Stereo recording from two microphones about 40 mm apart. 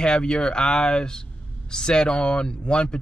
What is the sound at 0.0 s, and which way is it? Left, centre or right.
Speech, left.